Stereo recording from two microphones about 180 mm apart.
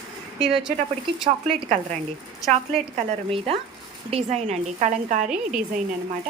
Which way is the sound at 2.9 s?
30° right (ahead or behind).